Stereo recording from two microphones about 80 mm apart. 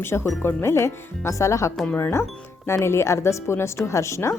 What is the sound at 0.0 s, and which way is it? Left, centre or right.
Speech, left.